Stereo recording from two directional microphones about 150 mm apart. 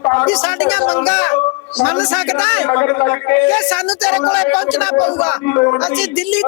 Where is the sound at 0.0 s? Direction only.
10° left (ahead or behind).